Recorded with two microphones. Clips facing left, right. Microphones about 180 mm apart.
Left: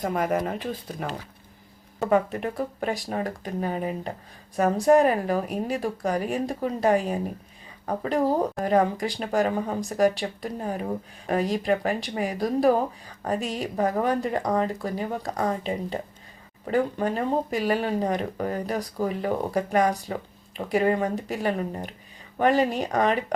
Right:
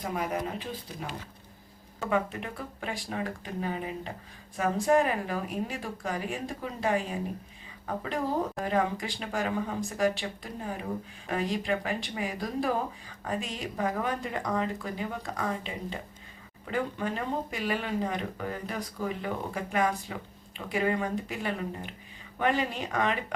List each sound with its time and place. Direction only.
0.0 s speech: 50° left (ahead or behind)
2.0 s speech: 40° left (ahead or behind)